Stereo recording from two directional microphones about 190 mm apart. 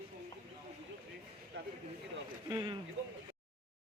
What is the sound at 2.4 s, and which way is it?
Speech, 20° right (ahead or behind).